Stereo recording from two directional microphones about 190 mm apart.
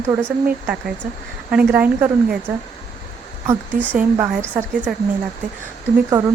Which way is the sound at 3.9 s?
10° right (ahead or behind).